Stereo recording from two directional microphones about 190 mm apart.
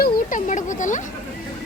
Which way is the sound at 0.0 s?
45° left (ahead or behind).